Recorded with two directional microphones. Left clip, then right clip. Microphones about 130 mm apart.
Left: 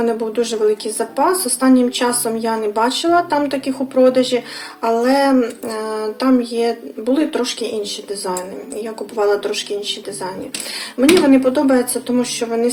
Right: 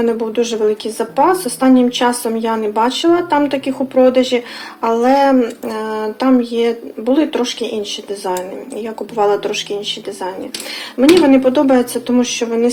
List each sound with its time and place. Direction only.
0.0 s speech: 20° right (ahead or behind)
9.1 s speech: 25° right (ahead or behind)
11.3 s speech: 25° right (ahead or behind)